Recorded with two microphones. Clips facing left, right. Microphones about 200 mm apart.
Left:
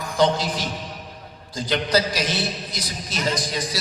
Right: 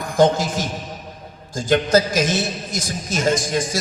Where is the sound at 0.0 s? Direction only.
50° right (ahead or behind).